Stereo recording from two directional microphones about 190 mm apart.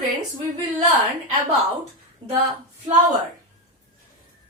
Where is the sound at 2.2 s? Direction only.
30° right (ahead or behind).